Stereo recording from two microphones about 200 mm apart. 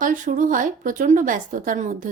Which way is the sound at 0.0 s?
40° right (ahead or behind).